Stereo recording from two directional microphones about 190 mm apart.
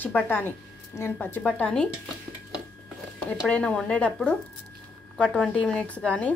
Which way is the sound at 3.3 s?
5° left (ahead or behind).